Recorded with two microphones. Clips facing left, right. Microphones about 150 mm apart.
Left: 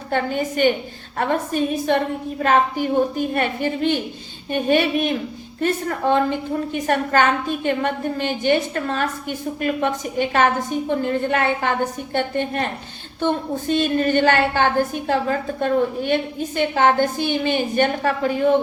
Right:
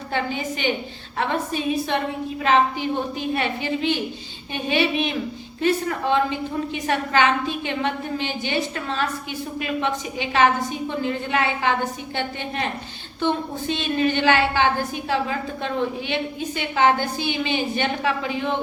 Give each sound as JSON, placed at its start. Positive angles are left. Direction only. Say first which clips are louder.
{"t": 0.1, "sound": "a woman's voice", "louder": "left 4 dB", "side_deg": 50}